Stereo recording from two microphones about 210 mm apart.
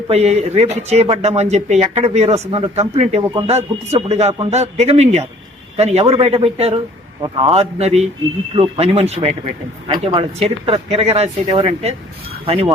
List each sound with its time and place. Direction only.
0.1 s a man's voice: 30° right (ahead or behind)